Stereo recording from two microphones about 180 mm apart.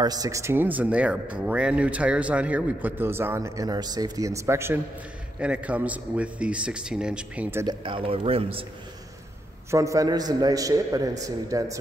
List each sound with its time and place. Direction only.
0.0 s speech: 20° right (ahead or behind)
7.6 s speech: 30° right (ahead or behind)
9.7 s a man's voice: 15° right (ahead or behind)